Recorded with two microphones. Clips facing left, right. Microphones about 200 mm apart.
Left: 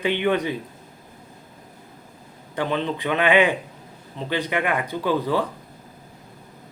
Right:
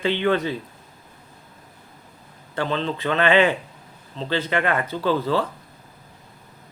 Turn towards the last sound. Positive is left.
turn(degrees=15)  # may be behind; listen again after turning